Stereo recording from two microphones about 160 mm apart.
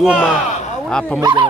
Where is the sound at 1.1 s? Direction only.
25° right (ahead or behind).